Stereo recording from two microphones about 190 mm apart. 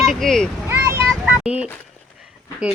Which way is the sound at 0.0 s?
Centre (ahead or behind).